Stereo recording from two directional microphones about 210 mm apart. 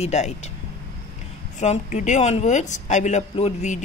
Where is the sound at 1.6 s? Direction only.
35° left (ahead or behind).